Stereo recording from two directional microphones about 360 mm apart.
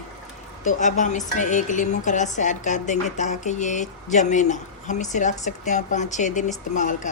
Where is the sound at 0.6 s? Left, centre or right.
Left.